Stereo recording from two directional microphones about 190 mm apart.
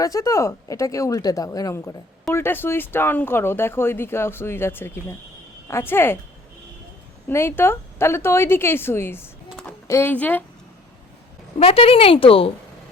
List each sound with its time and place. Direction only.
0.0 s speech: 15° left (ahead or behind)
7.3 s a woman's voice: 10° left (ahead or behind)
11.6 s speech: 30° left (ahead or behind)